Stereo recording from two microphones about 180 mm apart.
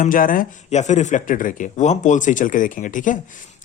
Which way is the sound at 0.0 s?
50° left (ahead or behind).